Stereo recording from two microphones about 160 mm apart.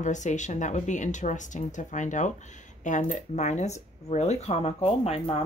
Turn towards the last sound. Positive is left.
turn(degrees=40)  # may be behind; listen again after turning